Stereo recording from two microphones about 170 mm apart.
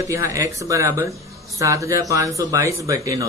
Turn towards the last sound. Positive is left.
turn(degrees=-20)  # may be behind; listen again after turning